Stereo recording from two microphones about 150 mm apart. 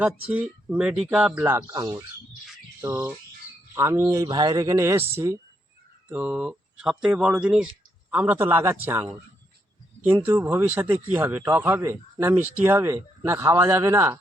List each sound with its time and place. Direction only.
0.3 s speech: 10° right (ahead or behind)
10.2 s speech: 15° right (ahead or behind)